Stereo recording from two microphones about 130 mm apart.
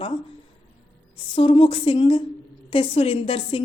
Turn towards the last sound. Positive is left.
turn(degrees=45)  # may be behind; listen again after turning